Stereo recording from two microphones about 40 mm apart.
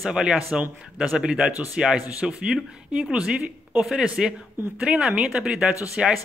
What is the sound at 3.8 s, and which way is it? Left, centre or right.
Speech, centre.